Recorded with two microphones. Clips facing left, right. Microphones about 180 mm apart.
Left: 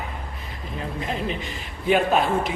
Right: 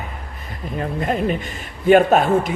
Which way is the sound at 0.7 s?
50° right (ahead or behind).